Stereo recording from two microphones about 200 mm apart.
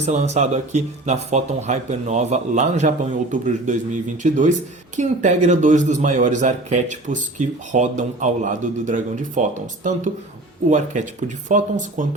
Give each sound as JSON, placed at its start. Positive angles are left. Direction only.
{"t": 0.0, "sound": "a man's voice", "side_deg": -35}